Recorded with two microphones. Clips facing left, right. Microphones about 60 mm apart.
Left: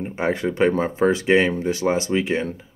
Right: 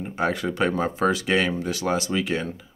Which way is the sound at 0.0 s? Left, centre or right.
Left.